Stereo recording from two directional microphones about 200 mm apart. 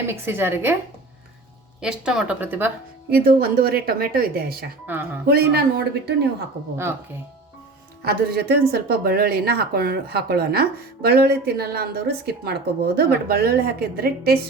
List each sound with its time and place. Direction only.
0.1 s a woman's voice: 10° right (ahead or behind)
1.8 s speech: 5° right (ahead or behind)
3.1 s speech: 50° right (ahead or behind)
8.0 s speech: 50° right (ahead or behind)